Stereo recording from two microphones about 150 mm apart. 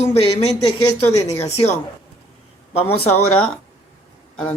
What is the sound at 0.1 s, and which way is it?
Speech, 45° left (ahead or behind).